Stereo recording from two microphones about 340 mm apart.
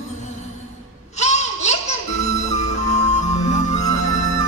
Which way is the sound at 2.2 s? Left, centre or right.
Centre.